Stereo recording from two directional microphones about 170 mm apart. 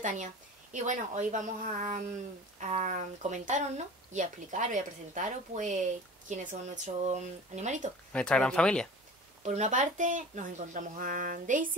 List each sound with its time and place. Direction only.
0.0 s a woman's voice: 45° right (ahead or behind)
8.1 s speech: 5° left (ahead or behind)
9.4 s speech: 40° right (ahead or behind)